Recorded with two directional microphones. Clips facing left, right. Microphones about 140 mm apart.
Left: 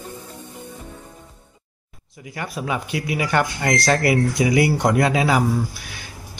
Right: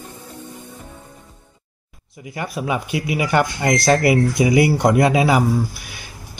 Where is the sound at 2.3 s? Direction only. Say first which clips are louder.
Right 3 dB; 15° right (ahead or behind).